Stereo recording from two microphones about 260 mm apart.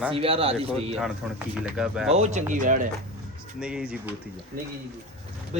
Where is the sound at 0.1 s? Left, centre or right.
Right.